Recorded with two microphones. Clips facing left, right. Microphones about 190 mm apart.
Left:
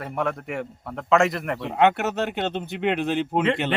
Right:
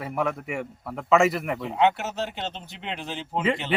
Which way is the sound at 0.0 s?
Centre (ahead or behind).